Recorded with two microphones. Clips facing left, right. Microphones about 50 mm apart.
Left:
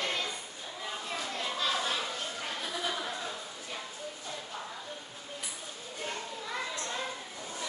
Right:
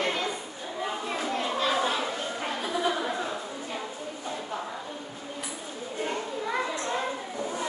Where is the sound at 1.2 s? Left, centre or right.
Right.